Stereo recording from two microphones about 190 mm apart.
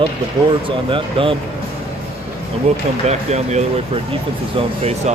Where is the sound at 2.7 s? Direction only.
35° right (ahead or behind).